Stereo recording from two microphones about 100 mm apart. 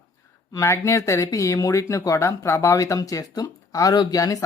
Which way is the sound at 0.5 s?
25° left (ahead or behind).